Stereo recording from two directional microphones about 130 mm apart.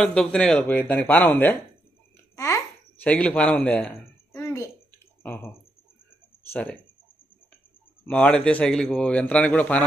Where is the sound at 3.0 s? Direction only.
10° left (ahead or behind).